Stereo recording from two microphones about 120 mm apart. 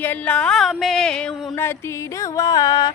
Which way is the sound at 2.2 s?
30° left (ahead or behind).